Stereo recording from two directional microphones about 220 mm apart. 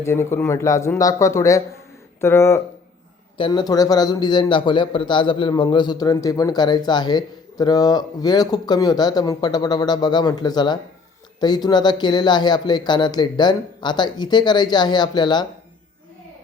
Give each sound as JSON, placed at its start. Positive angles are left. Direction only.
{"t": 0.0, "sound": "a man's voice", "side_deg": 10}